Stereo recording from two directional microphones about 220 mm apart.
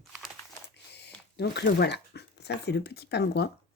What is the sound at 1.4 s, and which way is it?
Speech, 50° left (ahead or behind).